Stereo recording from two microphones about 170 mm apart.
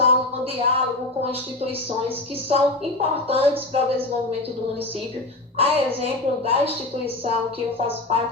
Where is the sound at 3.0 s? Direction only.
35° right (ahead or behind).